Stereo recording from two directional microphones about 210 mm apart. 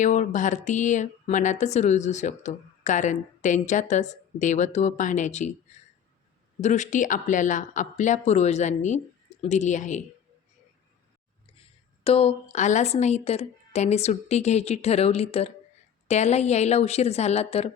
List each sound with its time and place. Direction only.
0.0 s speech: 35° left (ahead or behind)
6.6 s speech: 35° left (ahead or behind)
12.0 s a woman's voice: 25° left (ahead or behind)